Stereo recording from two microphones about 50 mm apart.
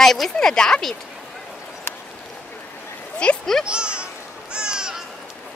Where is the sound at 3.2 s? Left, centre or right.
Left.